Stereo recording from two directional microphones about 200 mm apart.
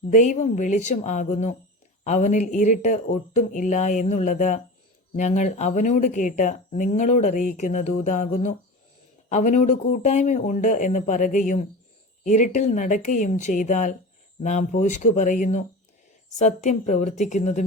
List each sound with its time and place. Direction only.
0.1 s speech: 35° left (ahead or behind)